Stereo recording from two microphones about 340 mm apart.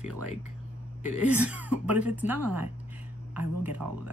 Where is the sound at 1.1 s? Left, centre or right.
Right.